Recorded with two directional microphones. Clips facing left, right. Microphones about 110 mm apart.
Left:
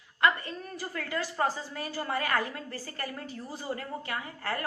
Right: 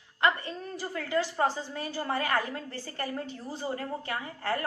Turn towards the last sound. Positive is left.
turn(degrees=-30)  # may be behind; listen again after turning